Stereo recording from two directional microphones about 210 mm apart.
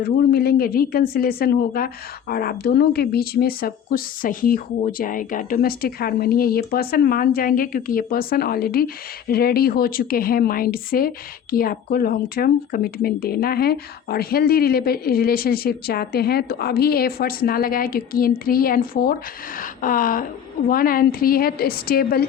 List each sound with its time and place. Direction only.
0.0 s speech: 50° left (ahead or behind)